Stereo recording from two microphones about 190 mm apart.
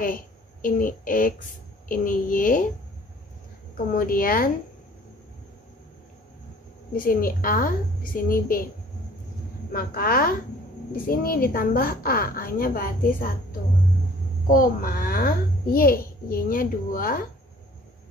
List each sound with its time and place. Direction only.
0.0 s a woman's voice: 45° left (ahead or behind)
3.7 s a child's voice: 50° left (ahead or behind)
6.9 s a child's voice: 50° left (ahead or behind)
9.7 s a child's voice: 50° left (ahead or behind)